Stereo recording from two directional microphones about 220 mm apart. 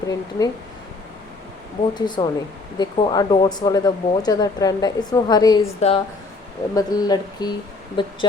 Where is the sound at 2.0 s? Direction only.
20° left (ahead or behind).